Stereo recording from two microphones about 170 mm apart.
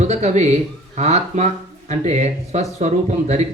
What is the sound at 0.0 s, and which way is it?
A man's voice, 40° right (ahead or behind).